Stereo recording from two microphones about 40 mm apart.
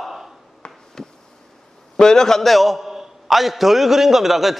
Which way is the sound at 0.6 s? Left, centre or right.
Left.